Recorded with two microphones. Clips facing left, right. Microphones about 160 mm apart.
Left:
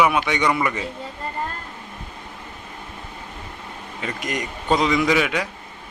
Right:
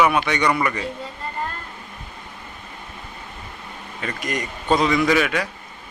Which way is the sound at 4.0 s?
15° left (ahead or behind).